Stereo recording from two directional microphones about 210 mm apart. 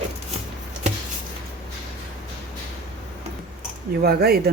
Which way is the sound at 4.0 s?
45° right (ahead or behind).